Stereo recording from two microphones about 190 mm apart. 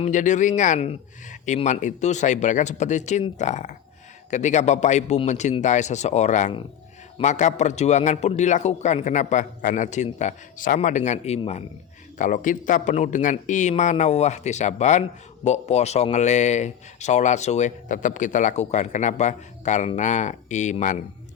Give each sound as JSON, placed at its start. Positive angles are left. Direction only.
{"t": 0.0, "sound": "a man's voice", "side_deg": 40}